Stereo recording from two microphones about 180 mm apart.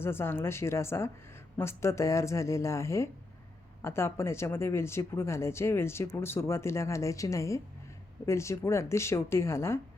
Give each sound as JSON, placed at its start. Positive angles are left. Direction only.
{"t": 0.0, "sound": "speech", "side_deg": 15}